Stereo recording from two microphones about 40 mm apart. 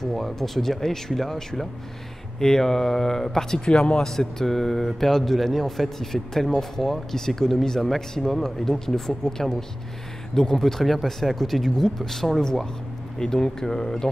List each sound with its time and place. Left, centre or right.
0.0 s speech: centre